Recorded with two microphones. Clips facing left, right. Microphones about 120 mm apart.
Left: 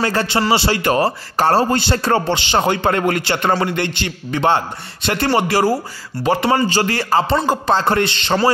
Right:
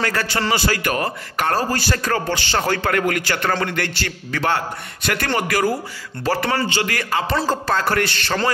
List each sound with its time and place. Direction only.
0.0 s a man's voice: 25° left (ahead or behind)
6.2 s a man's voice: 20° left (ahead or behind)
6.7 s a man's voice: 35° left (ahead or behind)
7.3 s a man's voice: 20° left (ahead or behind)